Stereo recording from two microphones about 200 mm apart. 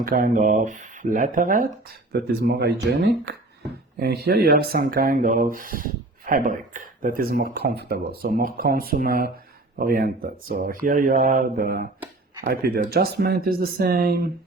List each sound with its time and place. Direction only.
0.0 s speech: 45° right (ahead or behind)
2.1 s speech: 55° right (ahead or behind)